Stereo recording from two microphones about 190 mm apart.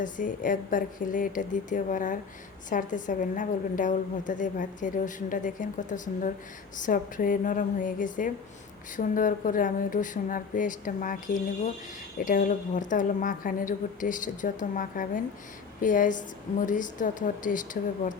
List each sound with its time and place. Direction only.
0.0 s a woman's voice: 45° left (ahead or behind)